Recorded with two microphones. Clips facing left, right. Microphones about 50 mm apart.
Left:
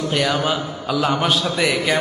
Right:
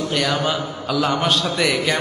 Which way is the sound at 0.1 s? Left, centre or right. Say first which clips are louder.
Left 2 dB; centre.